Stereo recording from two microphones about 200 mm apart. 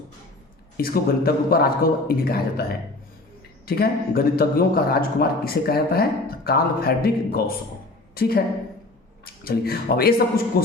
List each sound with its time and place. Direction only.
0.8 s a man's voice: 50° left (ahead or behind)
3.7 s a man's voice: 50° left (ahead or behind)